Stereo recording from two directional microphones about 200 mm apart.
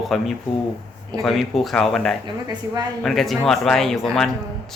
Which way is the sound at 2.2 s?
20° right (ahead or behind).